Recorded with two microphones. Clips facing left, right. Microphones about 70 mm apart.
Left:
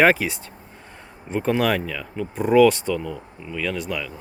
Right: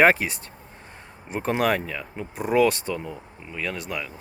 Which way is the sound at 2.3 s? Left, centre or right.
Centre.